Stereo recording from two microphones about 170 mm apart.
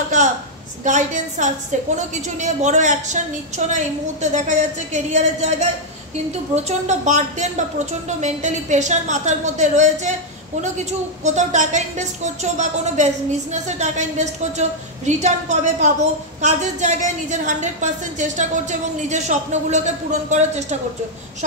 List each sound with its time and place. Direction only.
0.8 s a woman's voice: 45° right (ahead or behind)